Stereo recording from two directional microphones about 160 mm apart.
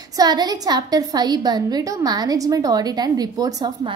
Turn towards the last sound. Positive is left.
turn(degrees=-25)  # may be behind; listen again after turning